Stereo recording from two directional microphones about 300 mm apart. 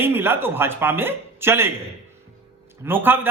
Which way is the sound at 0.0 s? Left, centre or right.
Centre.